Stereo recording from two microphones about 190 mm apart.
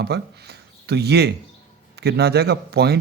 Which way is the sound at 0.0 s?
60° right (ahead or behind).